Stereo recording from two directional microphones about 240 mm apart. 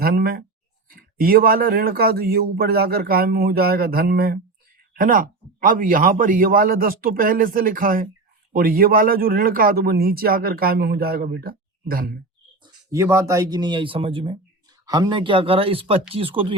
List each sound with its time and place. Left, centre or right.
0.0 s a sound: right
0.9 s speech: right
12.9 s speech: centre